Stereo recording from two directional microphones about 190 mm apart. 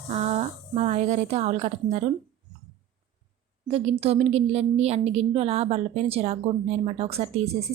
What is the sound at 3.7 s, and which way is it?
A woman's voice, 30° right (ahead or behind).